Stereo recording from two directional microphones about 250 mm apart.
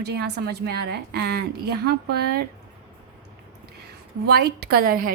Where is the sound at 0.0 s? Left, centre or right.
Right.